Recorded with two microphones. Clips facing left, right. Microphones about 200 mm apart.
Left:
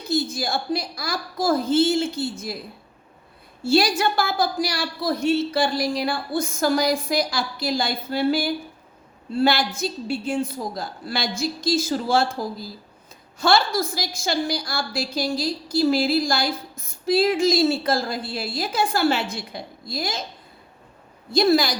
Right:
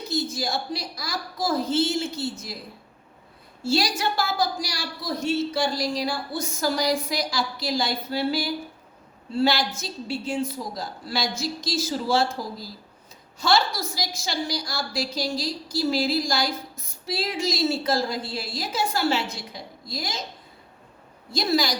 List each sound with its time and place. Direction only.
0.1 s a woman's voice: 55° left (ahead or behind)
3.6 s a woman's voice: 55° left (ahead or behind)
21.3 s a woman's voice: 55° left (ahead or behind)